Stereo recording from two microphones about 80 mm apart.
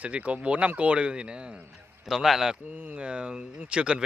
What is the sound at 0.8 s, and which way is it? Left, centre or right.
Speech, centre.